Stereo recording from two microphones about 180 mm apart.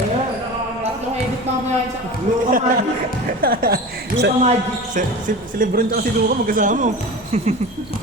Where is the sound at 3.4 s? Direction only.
55° right (ahead or behind).